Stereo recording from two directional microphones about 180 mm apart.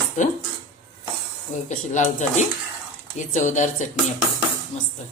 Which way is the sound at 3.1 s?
45° left (ahead or behind).